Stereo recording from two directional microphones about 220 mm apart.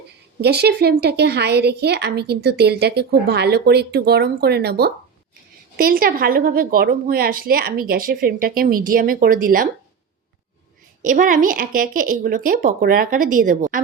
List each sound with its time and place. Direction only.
0.4 s a woman's voice: 50° right (ahead or behind)
11.0 s a woman's voice: 40° right (ahead or behind)